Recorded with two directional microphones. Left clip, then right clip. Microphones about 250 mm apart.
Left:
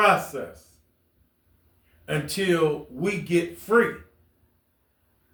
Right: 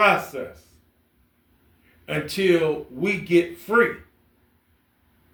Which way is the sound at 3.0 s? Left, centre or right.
Left.